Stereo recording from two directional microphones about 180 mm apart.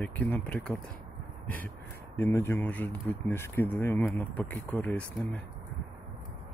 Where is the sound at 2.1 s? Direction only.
15° left (ahead or behind).